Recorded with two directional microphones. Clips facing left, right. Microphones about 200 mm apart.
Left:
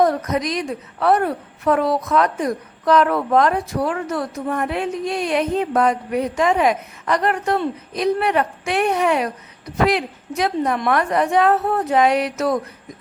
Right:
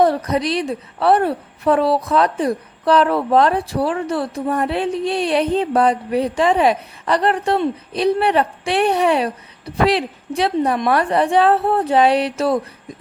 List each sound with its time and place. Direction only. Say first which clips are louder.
0.0 s a woman's voice: right 2 dB; 30° right (ahead or behind)